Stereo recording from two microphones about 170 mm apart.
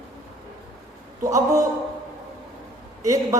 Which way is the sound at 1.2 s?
20° right (ahead or behind).